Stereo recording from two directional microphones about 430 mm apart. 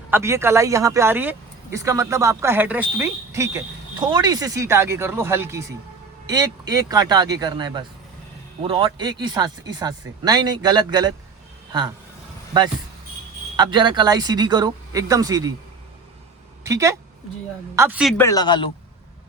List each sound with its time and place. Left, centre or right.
0.1 s speech: centre
13.6 s speech: centre
16.6 s speech: centre